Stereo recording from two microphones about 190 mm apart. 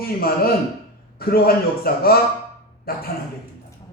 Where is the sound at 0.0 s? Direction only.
55° left (ahead or behind).